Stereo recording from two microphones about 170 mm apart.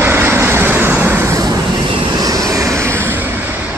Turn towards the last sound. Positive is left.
turn(degrees=-15)  # may be behind; listen again after turning